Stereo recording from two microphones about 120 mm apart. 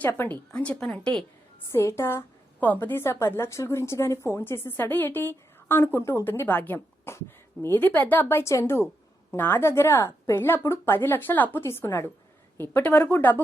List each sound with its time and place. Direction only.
0.2 s a woman's voice: 15° left (ahead or behind)
1.7 s a woman's voice: 20° left (ahead or behind)